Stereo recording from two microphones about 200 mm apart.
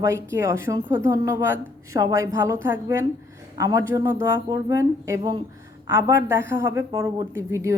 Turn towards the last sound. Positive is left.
turn(degrees=-15)  # may be behind; listen again after turning